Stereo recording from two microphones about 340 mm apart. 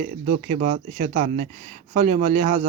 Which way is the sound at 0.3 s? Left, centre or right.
Right.